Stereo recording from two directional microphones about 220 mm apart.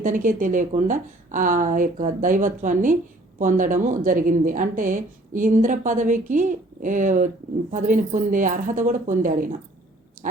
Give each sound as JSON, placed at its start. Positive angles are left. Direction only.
{"t": 0.0, "sound": "speech", "side_deg": -35}